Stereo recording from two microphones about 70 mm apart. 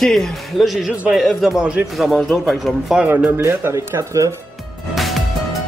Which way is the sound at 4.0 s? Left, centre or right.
Right.